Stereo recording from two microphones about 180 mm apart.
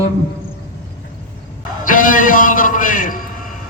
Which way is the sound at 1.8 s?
50° left (ahead or behind).